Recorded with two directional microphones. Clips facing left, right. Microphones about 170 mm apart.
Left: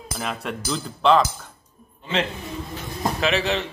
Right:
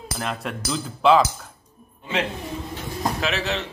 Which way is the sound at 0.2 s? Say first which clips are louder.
Even; centre (ahead or behind).